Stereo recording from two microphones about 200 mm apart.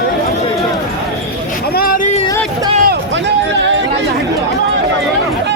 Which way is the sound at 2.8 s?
55° right (ahead or behind).